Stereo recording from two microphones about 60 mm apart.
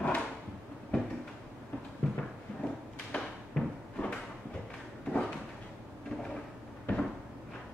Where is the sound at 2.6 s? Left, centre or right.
Centre.